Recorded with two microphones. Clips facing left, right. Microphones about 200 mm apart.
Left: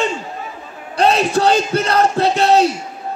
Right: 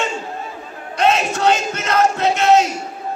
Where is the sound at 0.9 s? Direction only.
35° left (ahead or behind).